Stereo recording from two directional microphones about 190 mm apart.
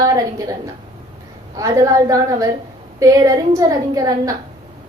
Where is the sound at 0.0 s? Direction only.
20° right (ahead or behind).